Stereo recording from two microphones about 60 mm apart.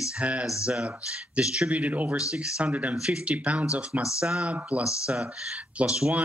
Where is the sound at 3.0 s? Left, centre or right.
Centre.